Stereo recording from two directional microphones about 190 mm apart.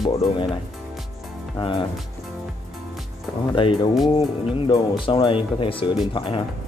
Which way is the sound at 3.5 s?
25° left (ahead or behind).